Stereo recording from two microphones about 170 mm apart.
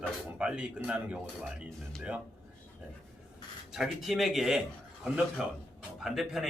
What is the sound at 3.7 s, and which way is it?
Speech, centre (ahead or behind).